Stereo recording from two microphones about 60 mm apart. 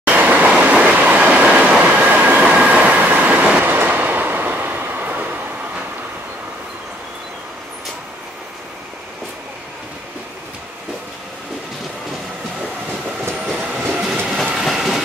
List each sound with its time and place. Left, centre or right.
0.0 s train: right
2.0 s train: right
13.5 s train: centre
14.2 s train: centre